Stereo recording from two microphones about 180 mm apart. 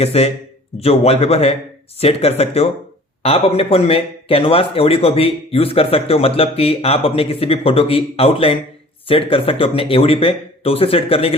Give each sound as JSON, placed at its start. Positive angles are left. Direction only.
{"t": 0.0, "sound": "speech", "side_deg": 35}